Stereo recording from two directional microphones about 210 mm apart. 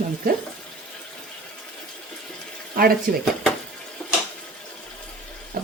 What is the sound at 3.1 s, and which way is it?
Speech, 45° right (ahead or behind).